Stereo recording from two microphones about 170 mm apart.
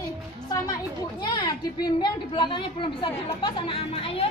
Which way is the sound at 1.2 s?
25° left (ahead or behind).